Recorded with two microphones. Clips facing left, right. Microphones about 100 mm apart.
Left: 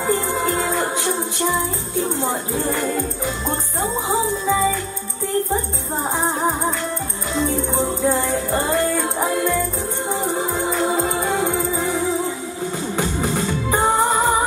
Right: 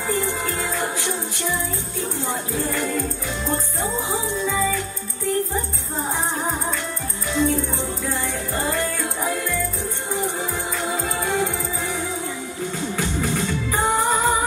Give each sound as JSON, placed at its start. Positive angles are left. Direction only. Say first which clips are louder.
{"t": 0.0, "sound": "music", "louder": "left 4 dB", "side_deg": 25}
{"t": 2.0, "sound": "speech", "louder": "left 6 dB", "side_deg": 20}
{"t": 7.3, "sound": "music", "louder": "left 1 dB", "side_deg": 20}
{"t": 11.0, "sound": "music", "louder": "left 3 dB", "side_deg": 20}
{"t": 12.9, "sound": "music", "louder": "left 3 dB", "side_deg": 20}